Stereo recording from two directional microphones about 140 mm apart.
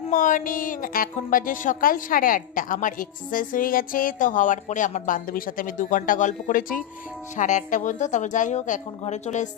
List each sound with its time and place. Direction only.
0.1 s a woman's voice: 70° left (ahead or behind)
7.3 s a woman's voice: 65° left (ahead or behind)